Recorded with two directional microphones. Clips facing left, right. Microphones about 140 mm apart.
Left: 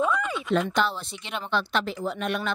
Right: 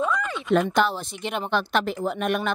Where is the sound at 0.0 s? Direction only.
5° left (ahead or behind).